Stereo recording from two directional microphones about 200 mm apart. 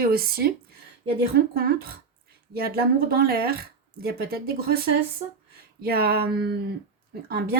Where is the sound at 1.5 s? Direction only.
50° right (ahead or behind).